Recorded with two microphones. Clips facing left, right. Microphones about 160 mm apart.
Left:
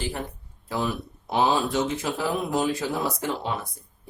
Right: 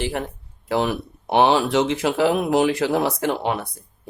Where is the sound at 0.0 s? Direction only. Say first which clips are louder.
Right 6 dB; 70° right (ahead or behind).